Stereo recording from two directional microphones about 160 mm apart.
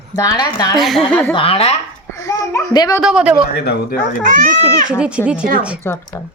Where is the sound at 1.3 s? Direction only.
35° left (ahead or behind).